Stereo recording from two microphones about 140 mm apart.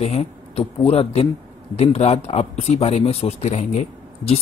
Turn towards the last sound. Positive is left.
turn(degrees=50)  # may be behind; listen again after turning